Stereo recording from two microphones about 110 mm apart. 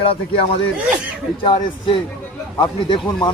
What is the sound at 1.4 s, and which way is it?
A man's voice, 45° left (ahead or behind).